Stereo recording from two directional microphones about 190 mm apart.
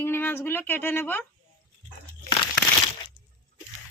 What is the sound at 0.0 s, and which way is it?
Speech, 10° left (ahead or behind).